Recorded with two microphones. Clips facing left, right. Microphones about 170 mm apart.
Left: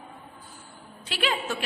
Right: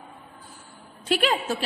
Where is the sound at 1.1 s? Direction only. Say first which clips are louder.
Right 5 dB; 45° right (ahead or behind).